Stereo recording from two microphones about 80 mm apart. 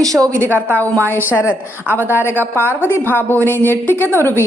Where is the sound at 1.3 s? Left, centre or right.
Left.